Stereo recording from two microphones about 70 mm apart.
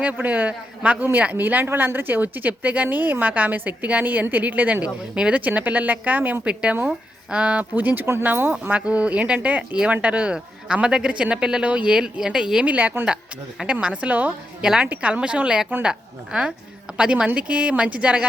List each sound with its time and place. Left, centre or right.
0.0 s speech: right
5.1 s speech: centre
5.4 s speech: right
12.6 s speech: right
14.6 s a woman's voice: centre